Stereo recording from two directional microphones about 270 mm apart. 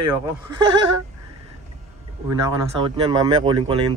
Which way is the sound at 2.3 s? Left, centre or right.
Centre.